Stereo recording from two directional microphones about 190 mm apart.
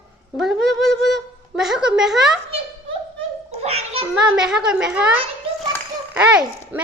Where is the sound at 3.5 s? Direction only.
35° right (ahead or behind).